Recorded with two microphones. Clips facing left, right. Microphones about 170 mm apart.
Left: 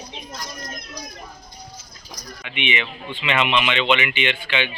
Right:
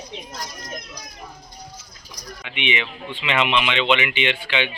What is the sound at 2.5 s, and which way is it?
Speech, 90° right.